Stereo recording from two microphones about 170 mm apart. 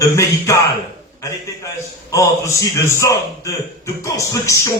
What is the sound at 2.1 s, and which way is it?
Speech, 20° left (ahead or behind).